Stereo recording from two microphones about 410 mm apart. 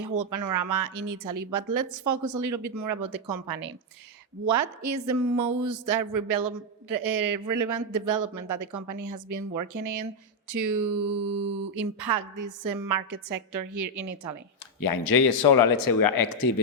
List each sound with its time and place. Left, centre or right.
0.2 s speech: right
4.4 s speech: right
14.8 s speech: left